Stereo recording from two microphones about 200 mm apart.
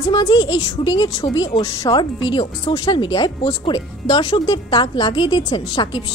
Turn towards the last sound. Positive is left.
turn(degrees=25)  # may be behind; listen again after turning